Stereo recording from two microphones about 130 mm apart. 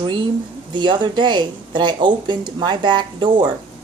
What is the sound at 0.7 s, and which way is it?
Speech, 35° right (ahead or behind).